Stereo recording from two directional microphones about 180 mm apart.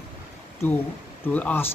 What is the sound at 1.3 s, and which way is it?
Speech, 10° left (ahead or behind).